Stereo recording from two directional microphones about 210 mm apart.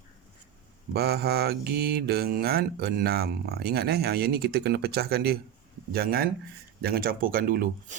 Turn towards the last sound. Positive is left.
turn(degrees=-40)  # may be behind; listen again after turning